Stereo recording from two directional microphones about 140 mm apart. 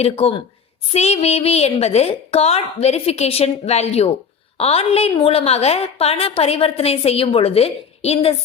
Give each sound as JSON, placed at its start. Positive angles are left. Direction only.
{"t": 0.0, "sound": "a woman's voice", "side_deg": 45}